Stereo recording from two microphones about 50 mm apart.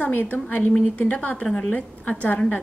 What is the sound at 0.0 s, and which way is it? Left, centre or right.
A woman's voice, left.